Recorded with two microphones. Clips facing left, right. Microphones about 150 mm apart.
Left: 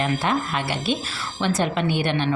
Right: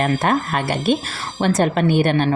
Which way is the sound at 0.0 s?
50° right (ahead or behind).